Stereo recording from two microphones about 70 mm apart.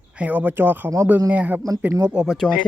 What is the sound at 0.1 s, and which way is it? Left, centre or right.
Speech, right.